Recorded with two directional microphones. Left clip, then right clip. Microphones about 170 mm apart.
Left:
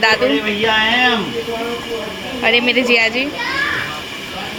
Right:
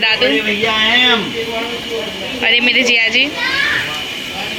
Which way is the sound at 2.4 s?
5° left (ahead or behind).